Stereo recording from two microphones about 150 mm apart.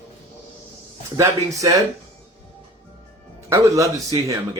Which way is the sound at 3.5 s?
20° right (ahead or behind).